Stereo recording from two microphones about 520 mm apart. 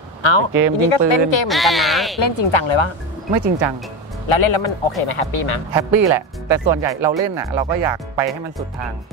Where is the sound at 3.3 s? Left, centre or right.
Right.